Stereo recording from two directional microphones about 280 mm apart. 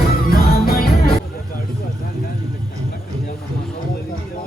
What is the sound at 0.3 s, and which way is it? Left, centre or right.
Music, left.